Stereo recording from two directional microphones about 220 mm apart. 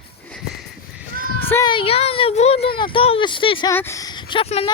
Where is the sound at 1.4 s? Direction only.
10° left (ahead or behind).